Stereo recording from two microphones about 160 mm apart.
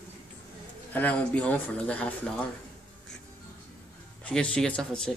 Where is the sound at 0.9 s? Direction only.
10° left (ahead or behind).